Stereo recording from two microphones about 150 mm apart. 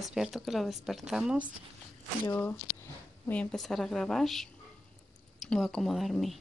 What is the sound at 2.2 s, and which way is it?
Speech, 15° left (ahead or behind).